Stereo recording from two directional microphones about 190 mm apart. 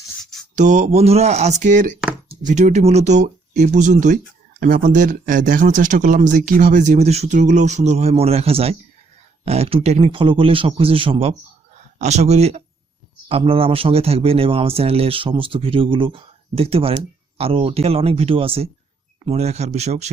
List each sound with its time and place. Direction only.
0.5 s speech: 40° right (ahead or behind)